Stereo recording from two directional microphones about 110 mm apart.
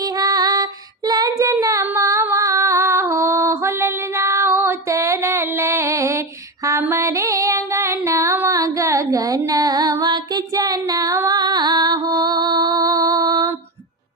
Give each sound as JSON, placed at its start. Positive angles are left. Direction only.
{"t": 0.2, "sound": "child singing", "side_deg": -35}
{"t": 1.6, "sound": "female singing", "side_deg": -30}
{"t": 6.7, "sound": "music", "side_deg": -25}